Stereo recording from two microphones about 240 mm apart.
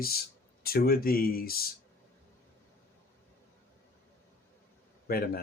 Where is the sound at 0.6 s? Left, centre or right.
Left.